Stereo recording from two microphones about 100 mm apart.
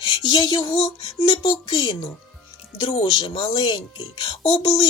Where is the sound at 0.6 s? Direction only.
60° left (ahead or behind).